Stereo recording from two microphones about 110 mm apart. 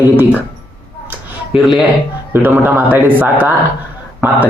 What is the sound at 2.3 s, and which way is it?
A man's voice, 20° right (ahead or behind).